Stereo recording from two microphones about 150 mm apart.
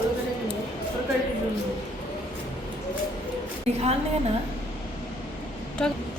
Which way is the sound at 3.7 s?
45° right (ahead or behind).